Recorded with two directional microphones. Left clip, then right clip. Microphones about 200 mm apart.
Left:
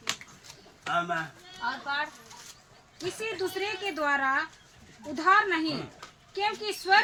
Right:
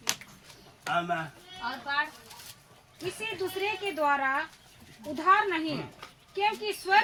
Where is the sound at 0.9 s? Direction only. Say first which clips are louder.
Even; 5° left (ahead or behind).